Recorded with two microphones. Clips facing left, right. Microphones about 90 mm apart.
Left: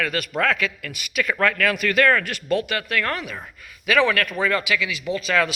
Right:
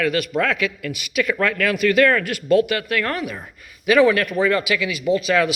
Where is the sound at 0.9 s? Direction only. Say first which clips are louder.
Right 3 dB; 40° left (ahead or behind).